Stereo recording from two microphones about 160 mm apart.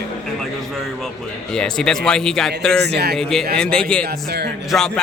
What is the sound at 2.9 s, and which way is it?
Speech, 90° right.